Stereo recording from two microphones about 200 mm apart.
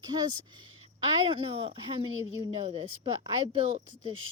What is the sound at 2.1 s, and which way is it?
Speech, 80° right.